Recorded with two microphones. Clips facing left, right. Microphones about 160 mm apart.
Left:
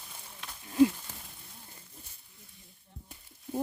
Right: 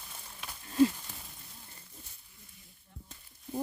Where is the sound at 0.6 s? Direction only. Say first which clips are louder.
Left 2 dB; 10° left (ahead or behind).